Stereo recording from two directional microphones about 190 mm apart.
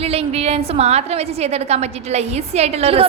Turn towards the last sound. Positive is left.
turn(degrees=-30)  # may be behind; listen again after turning